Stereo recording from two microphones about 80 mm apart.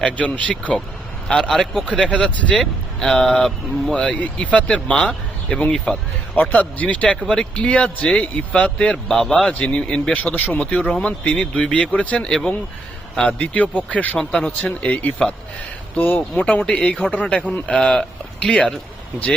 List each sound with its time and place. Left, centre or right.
0.0 s speech: centre
3.9 s speech: centre
5.7 s speech: centre
6.3 s speech: left
14.2 s speech: centre